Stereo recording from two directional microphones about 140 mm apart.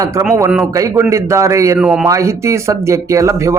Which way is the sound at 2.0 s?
20° right (ahead or behind).